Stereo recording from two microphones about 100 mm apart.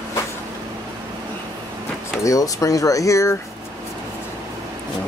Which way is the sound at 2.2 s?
35° left (ahead or behind).